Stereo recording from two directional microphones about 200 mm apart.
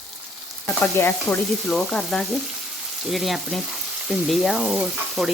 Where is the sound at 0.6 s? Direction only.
10° left (ahead or behind).